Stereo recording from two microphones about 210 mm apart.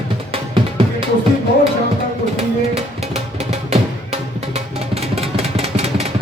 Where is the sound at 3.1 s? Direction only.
30° right (ahead or behind).